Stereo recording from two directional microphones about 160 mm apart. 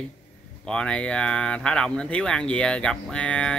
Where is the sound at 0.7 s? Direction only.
5° left (ahead or behind).